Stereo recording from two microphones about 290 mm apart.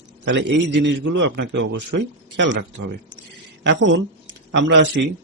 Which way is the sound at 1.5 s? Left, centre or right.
Right.